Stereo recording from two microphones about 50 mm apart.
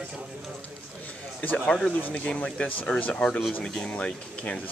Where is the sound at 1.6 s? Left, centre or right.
Centre.